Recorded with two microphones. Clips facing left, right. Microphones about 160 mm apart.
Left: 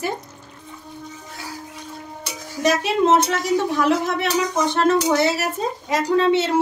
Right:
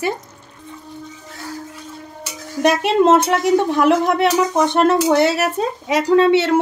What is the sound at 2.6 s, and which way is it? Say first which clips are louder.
Speech: right 4 dB; 60° right (ahead or behind).